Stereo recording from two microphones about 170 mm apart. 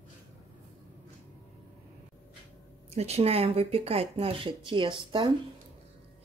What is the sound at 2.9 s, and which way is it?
Speech, 40° right (ahead or behind).